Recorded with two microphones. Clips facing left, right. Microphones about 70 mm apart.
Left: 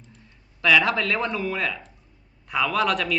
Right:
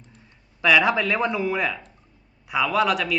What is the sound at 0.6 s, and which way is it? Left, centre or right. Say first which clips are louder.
A man's voice: right 1 dB; centre.